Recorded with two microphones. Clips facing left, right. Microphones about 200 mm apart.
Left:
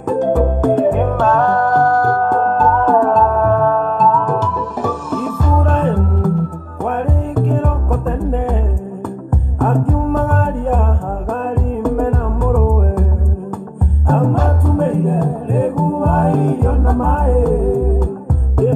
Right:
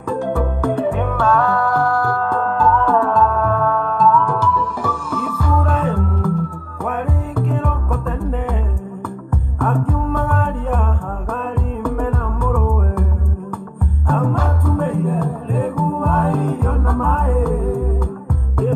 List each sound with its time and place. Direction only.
0.2 s music: 40° left (ahead or behind)
1.9 s music: 20° left (ahead or behind)
2.1 s music: 45° left (ahead or behind)
5.4 s music: 40° left (ahead or behind)
9.8 s music: 40° left (ahead or behind)
14.0 s music: 40° left (ahead or behind)